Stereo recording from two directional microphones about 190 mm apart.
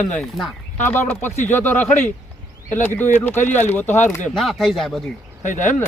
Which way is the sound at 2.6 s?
40° left (ahead or behind).